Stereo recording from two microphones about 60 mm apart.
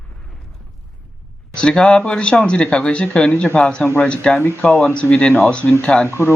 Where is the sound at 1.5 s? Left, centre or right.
Centre.